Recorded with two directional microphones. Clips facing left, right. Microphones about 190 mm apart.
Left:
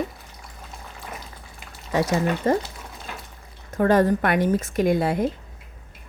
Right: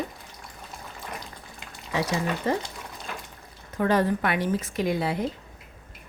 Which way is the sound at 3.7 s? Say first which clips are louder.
Left 5 dB; 45° left (ahead or behind).